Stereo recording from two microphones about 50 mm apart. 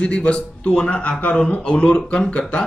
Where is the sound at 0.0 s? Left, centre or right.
Centre.